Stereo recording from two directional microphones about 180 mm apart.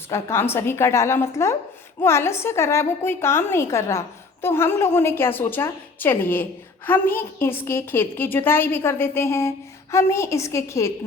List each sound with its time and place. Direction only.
0.1 s a woman's voice: 15° left (ahead or behind)